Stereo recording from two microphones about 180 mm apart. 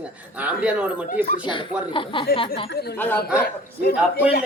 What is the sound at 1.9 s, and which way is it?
Speech, 30° left (ahead or behind).